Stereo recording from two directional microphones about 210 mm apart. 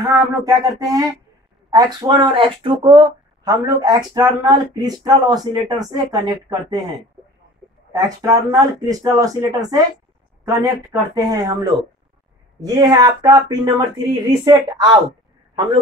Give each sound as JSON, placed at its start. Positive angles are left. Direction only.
{"t": 0.0, "sound": "speech", "side_deg": -15}
{"t": 7.9, "sound": "speech", "side_deg": -15}
{"t": 12.6, "sound": "speech", "side_deg": -20}